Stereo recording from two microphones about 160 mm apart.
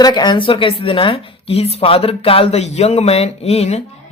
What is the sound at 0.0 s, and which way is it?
A woman's voice, 25° left (ahead or behind).